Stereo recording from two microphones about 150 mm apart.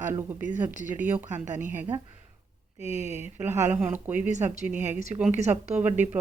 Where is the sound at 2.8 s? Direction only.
45° left (ahead or behind).